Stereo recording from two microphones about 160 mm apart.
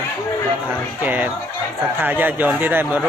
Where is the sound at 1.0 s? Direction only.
10° right (ahead or behind).